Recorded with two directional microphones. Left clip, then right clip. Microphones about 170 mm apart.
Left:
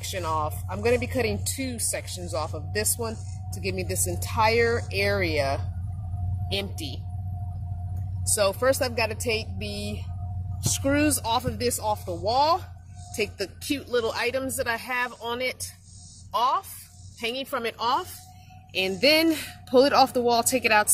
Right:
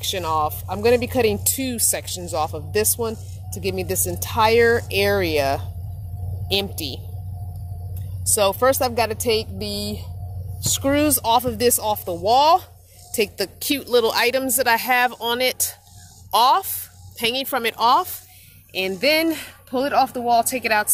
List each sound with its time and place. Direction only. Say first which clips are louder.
0.0 s speech: right 6 dB; 60° right (ahead or behind)
8.4 s a woman's voice: right 5 dB; 55° right (ahead or behind)
18.7 s speech: right 2 dB; 25° right (ahead or behind)